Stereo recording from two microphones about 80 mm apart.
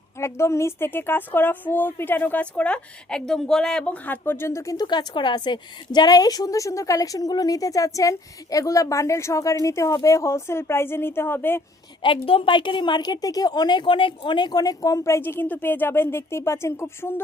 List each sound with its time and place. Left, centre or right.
0.2 s a woman's voice: left
4.9 s a woman's voice: left
12.0 s a woman's voice: left